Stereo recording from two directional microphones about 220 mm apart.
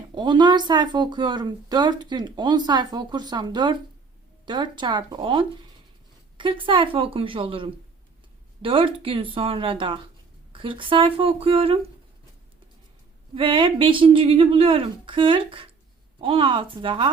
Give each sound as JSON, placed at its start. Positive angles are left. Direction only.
{"t": 0.1, "sound": "speech", "side_deg": -20}
{"t": 13.3, "sound": "speech", "side_deg": -25}